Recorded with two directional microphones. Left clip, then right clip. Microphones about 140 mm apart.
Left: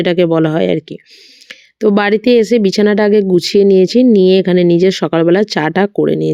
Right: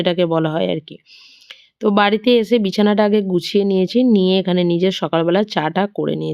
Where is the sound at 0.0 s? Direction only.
55° left (ahead or behind).